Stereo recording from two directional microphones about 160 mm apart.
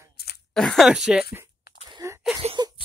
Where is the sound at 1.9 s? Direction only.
20° right (ahead or behind).